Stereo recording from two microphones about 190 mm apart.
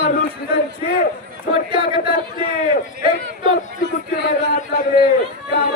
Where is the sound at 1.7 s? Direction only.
25° right (ahead or behind).